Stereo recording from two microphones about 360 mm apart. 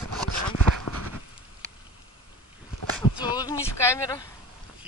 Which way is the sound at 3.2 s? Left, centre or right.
Centre.